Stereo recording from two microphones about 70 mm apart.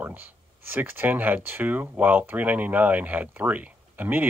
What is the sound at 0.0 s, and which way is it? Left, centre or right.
Speech, right.